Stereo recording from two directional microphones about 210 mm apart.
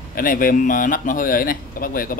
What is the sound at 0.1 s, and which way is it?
Speech, 40° left (ahead or behind).